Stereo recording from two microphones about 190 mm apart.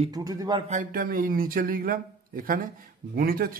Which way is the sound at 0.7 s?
45° right (ahead or behind).